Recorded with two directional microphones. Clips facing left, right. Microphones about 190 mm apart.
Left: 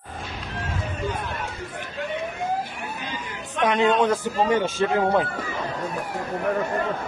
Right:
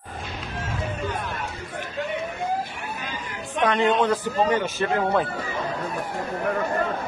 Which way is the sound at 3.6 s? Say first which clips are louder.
Left 1 dB; 10° left (ahead or behind).